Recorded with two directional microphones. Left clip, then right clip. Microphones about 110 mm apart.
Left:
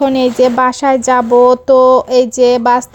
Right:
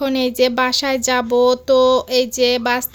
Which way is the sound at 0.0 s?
55° left (ahead or behind).